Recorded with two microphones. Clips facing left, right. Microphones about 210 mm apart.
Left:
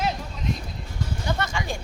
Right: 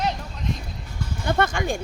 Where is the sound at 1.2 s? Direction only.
55° right (ahead or behind).